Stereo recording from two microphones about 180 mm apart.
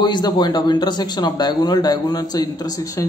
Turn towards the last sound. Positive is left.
turn(degrees=20)  # may be behind; listen again after turning